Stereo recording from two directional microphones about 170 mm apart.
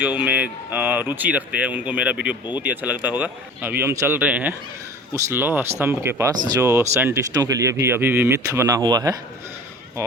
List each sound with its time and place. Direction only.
0.0 s speech: 10° right (ahead or behind)